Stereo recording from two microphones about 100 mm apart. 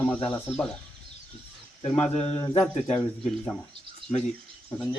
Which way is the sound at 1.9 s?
90° left.